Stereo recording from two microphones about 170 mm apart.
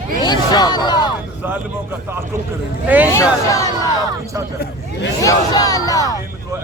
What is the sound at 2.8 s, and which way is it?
Hubbub, 10° right (ahead or behind).